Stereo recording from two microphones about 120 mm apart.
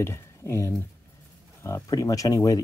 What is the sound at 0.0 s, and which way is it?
Speech, 20° left (ahead or behind).